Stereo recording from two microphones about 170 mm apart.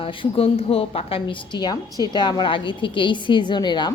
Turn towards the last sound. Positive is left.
turn(degrees=25)  # may be behind; listen again after turning